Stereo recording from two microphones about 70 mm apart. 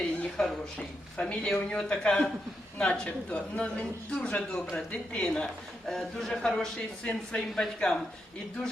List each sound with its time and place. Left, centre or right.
0.4 s a man's voice: centre